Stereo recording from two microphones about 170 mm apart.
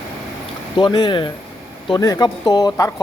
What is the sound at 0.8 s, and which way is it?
Speech, 25° left (ahead or behind).